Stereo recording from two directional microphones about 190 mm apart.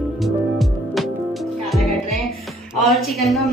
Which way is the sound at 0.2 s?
Centre (ahead or behind).